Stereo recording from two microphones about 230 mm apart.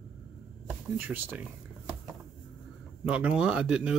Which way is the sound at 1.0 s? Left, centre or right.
Centre.